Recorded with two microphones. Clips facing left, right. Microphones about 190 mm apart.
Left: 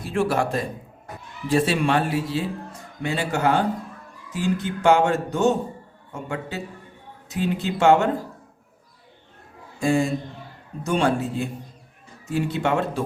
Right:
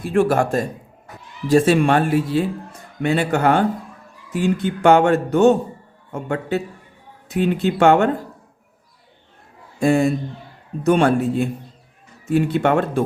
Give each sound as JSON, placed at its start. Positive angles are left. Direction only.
{"t": 0.0, "sound": "speech", "side_deg": -50}
{"t": 9.8, "sound": "speech", "side_deg": -60}